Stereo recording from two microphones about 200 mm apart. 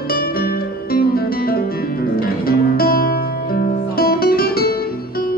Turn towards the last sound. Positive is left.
turn(degrees=50)  # may be behind; listen again after turning